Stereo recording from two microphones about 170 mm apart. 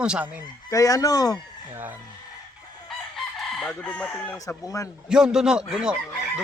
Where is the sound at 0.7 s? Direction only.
20° left (ahead or behind).